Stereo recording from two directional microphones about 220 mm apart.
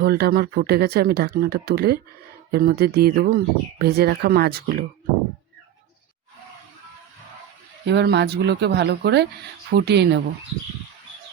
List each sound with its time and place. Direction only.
0.0 s speech: 45° right (ahead or behind)
7.9 s speech: 50° right (ahead or behind)